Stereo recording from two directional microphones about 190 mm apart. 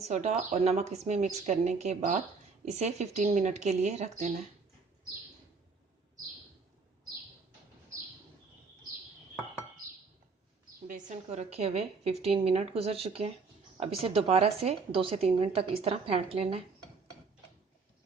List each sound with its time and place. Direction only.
0.0 s a woman's voice: 35° right (ahead or behind)
10.8 s a woman's voice: 40° right (ahead or behind)